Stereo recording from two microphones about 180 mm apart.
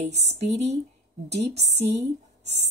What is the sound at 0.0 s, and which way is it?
Speech, 40° right (ahead or behind).